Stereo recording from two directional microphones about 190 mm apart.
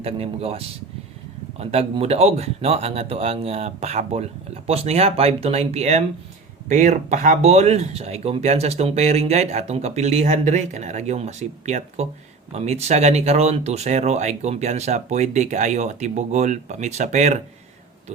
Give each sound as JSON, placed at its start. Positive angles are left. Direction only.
{"t": 0.0, "sound": "speech", "side_deg": -30}